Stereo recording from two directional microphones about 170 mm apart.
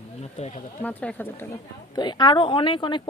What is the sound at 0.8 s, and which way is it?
Speech, 10° left (ahead or behind).